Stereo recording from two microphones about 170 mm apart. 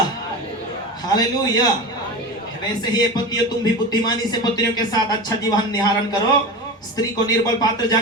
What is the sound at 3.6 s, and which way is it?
A man's voice, 25° left (ahead or behind).